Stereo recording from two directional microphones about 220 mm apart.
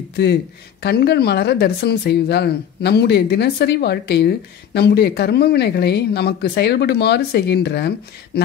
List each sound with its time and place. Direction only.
0.1 s speech: 50° left (ahead or behind)